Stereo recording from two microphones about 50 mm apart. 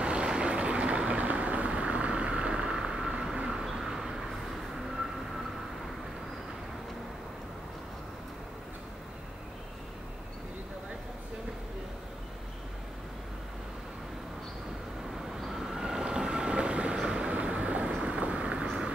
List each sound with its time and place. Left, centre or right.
0.0 s vehicle: centre
15.4 s train: centre
18.7 s a sound: centre